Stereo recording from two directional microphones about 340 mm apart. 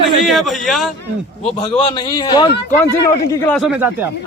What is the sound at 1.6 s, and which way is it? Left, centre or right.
Speech, centre.